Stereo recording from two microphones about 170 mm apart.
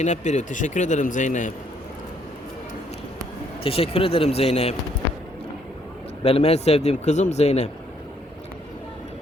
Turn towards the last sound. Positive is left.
turn(degrees=40)  # may be behind; listen again after turning